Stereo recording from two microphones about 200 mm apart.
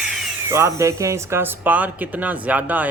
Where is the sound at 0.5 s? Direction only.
15° right (ahead or behind).